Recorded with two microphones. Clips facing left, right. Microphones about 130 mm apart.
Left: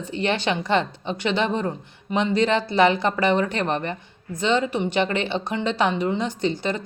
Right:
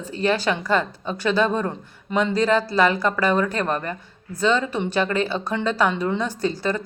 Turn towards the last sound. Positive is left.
turn(degrees=20)  # may be behind; listen again after turning